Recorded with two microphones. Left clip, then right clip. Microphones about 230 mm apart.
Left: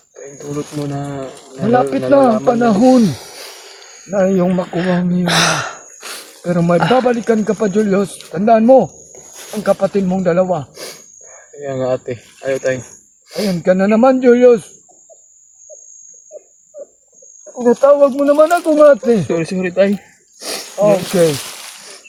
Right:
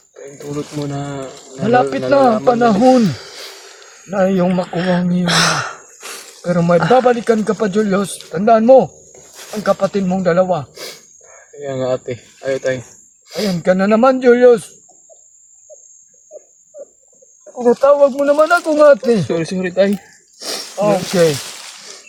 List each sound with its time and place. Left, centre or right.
0.2 s speech: centre
1.7 s speech: right
3.0 s a sound: centre
4.1 s speech: right
4.7 s speech: centre
5.2 s sigh: centre
6.4 s speech: right
11.5 s speech: centre
13.5 s speech: right
17.5 s speech: right
19.3 s speech: centre
20.4 s a sound: centre
20.7 s speech: right